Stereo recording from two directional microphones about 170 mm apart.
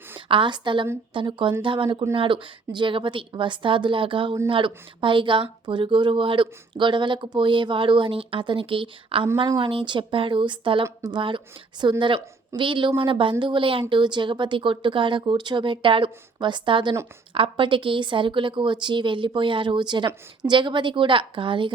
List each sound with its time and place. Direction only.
0.3 s speech: 30° right (ahead or behind)